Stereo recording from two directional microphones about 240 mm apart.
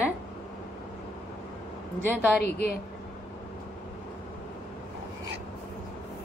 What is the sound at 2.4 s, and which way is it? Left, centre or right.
Speech, left.